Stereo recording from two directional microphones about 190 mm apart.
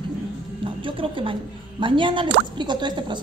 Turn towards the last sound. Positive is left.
turn(degrees=-25)  # may be behind; listen again after turning